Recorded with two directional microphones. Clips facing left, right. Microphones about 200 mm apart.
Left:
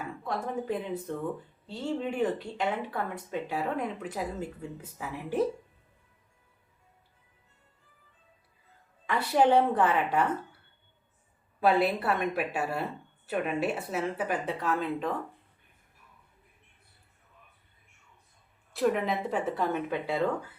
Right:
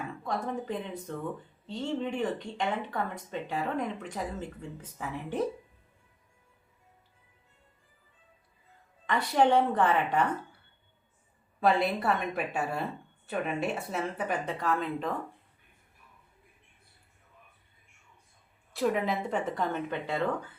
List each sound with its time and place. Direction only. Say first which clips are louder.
0.3 s speech: left 1 dB; 5° left (ahead or behind)
9.0 s a woman's voice: left 1 dB; 5° left (ahead or behind)
11.6 s speech: left 1 dB; 5° left (ahead or behind)
18.7 s speech: left 1 dB; centre (ahead or behind)